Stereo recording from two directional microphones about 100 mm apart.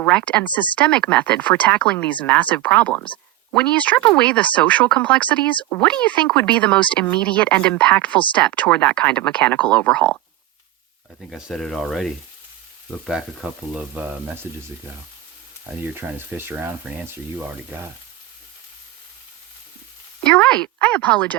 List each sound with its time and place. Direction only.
0.0 s speech: 15° left (ahead or behind)
11.3 s speech: 5° right (ahead or behind)
15.8 s speech: 20° right (ahead or behind)
20.2 s speech: 10° left (ahead or behind)